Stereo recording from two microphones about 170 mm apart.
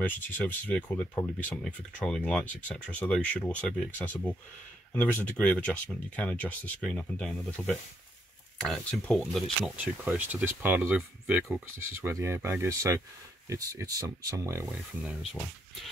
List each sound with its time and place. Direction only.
0.0 s speech: 10° left (ahead or behind)
9.6 s speech: 10° right (ahead or behind)
14.7 s speech: centre (ahead or behind)